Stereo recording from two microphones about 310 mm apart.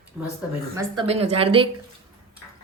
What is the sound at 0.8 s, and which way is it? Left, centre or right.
Speech, centre.